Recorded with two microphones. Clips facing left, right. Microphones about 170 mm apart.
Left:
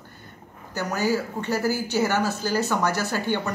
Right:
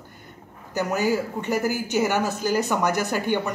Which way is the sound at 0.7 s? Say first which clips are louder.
Right 2 dB; 20° right (ahead or behind).